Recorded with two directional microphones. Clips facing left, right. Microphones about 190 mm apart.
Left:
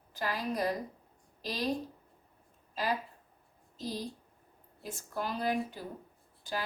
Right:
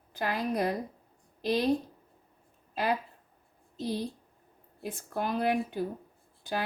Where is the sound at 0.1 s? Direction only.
55° right (ahead or behind).